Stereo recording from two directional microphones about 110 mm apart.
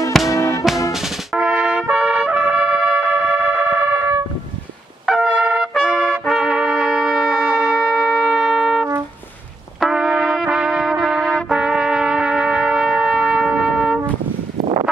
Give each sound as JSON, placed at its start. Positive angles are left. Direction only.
{"t": 0.3, "sound": "music", "side_deg": 30}
{"t": 0.9, "sound": "trumpet", "side_deg": -5}
{"t": 5.0, "sound": "trumpet", "side_deg": -5}
{"t": 9.8, "sound": "brass instrument", "side_deg": -5}